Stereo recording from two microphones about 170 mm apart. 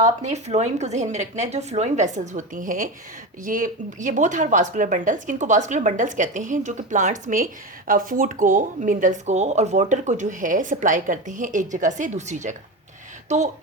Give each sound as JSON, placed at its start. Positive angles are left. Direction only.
{"t": 0.0, "sound": "speech", "side_deg": -45}